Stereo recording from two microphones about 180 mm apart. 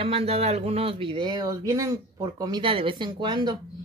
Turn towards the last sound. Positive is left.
turn(degrees=-25)  # may be behind; listen again after turning